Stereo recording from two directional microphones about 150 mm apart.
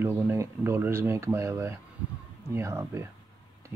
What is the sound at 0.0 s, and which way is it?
Speech, 15° right (ahead or behind).